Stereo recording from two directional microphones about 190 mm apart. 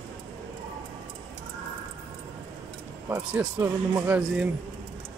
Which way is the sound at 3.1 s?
10° right (ahead or behind).